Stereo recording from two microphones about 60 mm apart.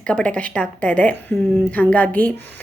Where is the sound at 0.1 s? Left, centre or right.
Centre.